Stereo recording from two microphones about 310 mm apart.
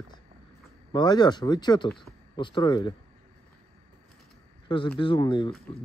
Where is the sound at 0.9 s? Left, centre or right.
Centre.